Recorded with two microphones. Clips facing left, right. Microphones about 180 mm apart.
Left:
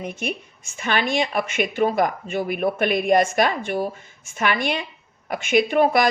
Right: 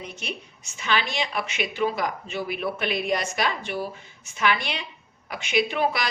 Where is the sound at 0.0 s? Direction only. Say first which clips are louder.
Left 7 dB; 50° left (ahead or behind).